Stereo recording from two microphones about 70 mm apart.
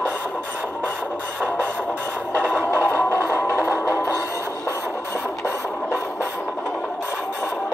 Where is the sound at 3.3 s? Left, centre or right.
Left.